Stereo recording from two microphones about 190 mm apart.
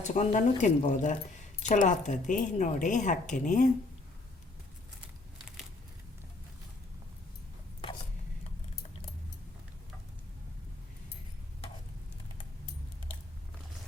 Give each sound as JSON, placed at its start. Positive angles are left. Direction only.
{"t": 0.0, "sound": "speech", "side_deg": 40}